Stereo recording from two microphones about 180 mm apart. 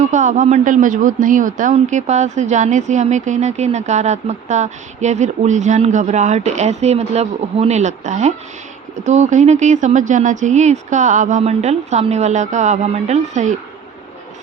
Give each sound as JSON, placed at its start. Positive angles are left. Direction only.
{"t": 0.0, "sound": "a man's voice", "side_deg": -40}